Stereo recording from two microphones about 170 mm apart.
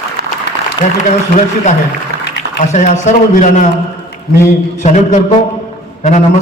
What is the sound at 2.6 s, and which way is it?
A man's voice, 45° left (ahead or behind).